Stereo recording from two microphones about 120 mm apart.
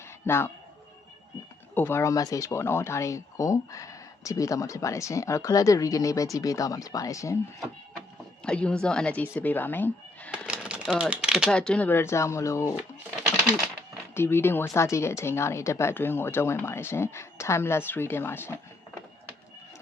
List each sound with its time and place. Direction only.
0.3 s speech: 20° left (ahead or behind)
1.7 s speech: 20° left (ahead or behind)
8.4 s speech: 10° left (ahead or behind)
10.3 s a sound: 10° right (ahead or behind)
11.5 s speech: 10° left (ahead or behind); by 12.7 s 25° left (ahead or behind)
14.1 s speech: 20° left (ahead or behind)